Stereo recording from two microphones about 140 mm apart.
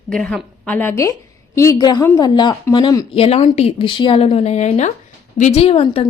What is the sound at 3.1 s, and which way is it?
Speech, 45° left (ahead or behind).